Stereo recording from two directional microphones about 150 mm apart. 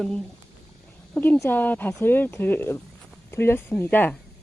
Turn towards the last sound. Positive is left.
turn(degrees=10)  # may be behind; listen again after turning